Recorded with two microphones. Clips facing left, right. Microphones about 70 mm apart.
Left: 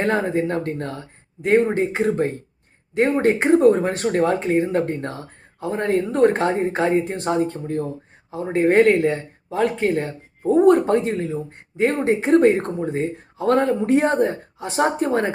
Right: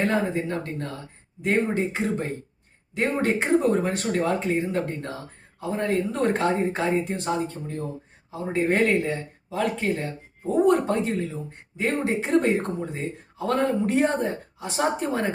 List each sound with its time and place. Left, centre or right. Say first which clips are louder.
0.0 s speech: left 4 dB; left